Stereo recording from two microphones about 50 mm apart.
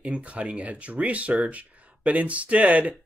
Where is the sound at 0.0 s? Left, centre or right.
Right.